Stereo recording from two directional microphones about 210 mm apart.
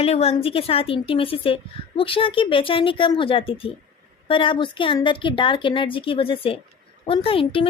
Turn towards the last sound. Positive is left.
turn(degrees=25)  # may be behind; listen again after turning